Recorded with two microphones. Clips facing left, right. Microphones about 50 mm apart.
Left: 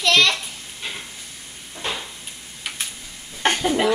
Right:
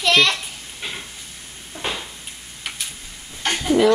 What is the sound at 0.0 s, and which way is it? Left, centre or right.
Children playing, centre.